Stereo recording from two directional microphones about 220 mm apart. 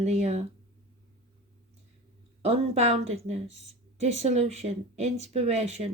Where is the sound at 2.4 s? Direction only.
30° right (ahead or behind).